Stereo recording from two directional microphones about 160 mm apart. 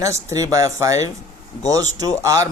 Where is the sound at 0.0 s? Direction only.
20° right (ahead or behind).